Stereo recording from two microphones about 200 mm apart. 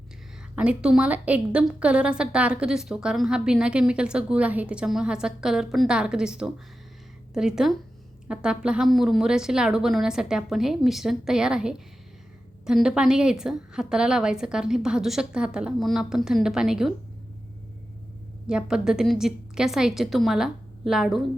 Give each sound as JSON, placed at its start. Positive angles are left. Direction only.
{"t": 0.5, "sound": "a woman's voice", "side_deg": -5}
{"t": 18.4, "sound": "a woman's voice", "side_deg": -5}